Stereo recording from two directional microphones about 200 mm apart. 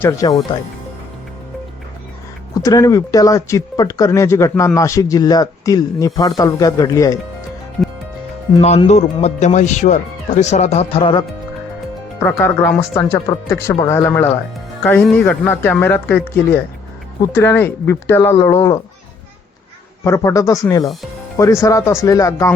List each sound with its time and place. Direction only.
0.0 s speech: 15° left (ahead or behind)
2.6 s speech: 15° left (ahead or behind)
8.6 s speech: 30° left (ahead or behind)
12.2 s speech: 10° left (ahead or behind)
20.1 s speech: 15° left (ahead or behind)